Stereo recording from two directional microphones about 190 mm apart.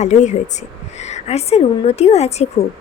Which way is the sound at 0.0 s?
40° left (ahead or behind).